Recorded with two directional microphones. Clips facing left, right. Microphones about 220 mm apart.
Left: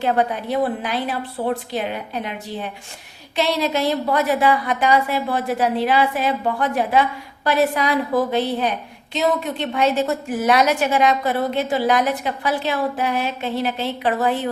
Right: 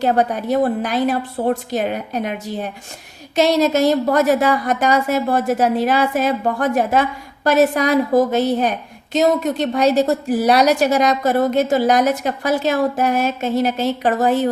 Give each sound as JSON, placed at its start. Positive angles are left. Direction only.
{"t": 0.0, "sound": "a woman's voice", "side_deg": -40}